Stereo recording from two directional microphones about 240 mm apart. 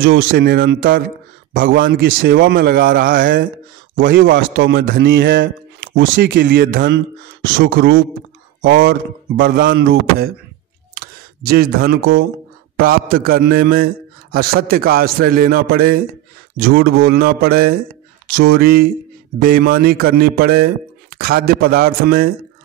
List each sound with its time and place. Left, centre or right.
0.3 s a man's voice: right